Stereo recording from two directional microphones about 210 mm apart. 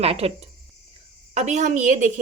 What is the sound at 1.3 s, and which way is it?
Speech, 35° right (ahead or behind).